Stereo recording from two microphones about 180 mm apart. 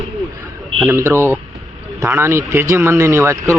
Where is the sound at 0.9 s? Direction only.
15° right (ahead or behind).